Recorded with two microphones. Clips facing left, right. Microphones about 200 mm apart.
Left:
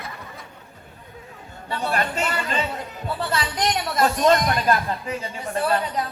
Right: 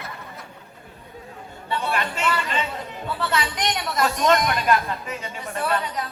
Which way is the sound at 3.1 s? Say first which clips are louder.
Even; 30° left (ahead or behind).